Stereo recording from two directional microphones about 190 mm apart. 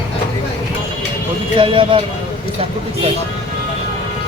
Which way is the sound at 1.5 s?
25° right (ahead or behind).